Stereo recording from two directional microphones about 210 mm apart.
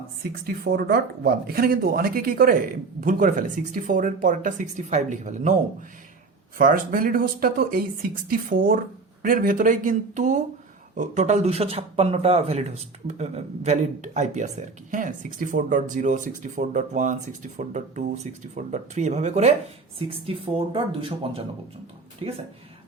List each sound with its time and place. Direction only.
0.2 s speech: 45° right (ahead or behind)
6.6 s speech: 40° right (ahead or behind); by 21.4 s 25° right (ahead or behind)